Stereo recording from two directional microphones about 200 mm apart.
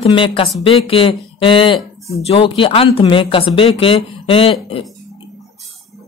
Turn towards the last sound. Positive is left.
turn(degrees=25)  # may be behind; listen again after turning